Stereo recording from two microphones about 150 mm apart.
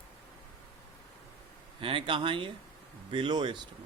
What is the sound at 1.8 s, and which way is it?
Speech, 35° right (ahead or behind).